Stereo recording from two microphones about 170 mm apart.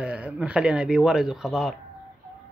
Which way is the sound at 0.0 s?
5° right (ahead or behind).